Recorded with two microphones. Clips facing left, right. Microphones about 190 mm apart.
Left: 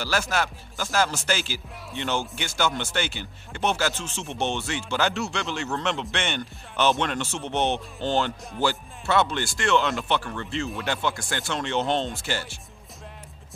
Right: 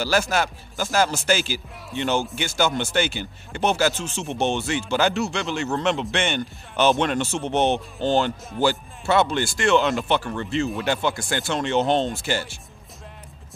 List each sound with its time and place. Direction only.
0.2 s speech: 25° right (ahead or behind)